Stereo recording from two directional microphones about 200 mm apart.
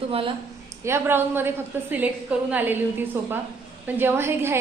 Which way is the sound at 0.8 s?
10° right (ahead or behind).